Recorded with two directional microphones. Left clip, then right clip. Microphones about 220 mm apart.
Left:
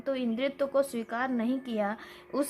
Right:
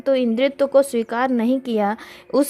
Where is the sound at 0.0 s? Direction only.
35° right (ahead or behind).